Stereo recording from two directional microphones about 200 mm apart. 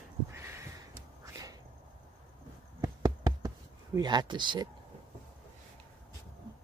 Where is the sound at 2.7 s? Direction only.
20° right (ahead or behind).